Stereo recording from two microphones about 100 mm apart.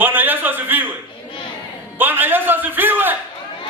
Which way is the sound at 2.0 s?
20° right (ahead or behind).